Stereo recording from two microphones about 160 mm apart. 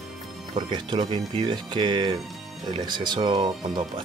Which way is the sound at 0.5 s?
30° right (ahead or behind).